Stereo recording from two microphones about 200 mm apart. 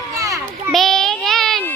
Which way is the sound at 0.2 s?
15° right (ahead or behind).